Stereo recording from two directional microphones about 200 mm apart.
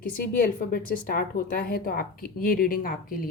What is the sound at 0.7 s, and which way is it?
A woman's voice, 45° left (ahead or behind).